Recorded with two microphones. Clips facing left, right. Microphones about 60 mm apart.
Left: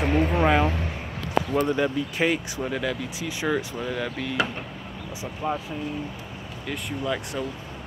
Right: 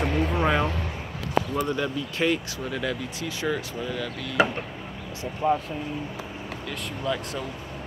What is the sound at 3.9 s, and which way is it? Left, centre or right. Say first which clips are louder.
Speech: left 3 dB; left.